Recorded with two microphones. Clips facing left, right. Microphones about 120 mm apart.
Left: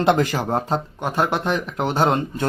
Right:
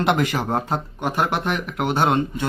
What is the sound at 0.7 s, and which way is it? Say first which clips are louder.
Speech: left 1 dB; 15° right (ahead or behind).